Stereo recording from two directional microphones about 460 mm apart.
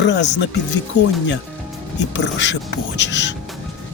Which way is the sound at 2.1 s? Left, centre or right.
Left.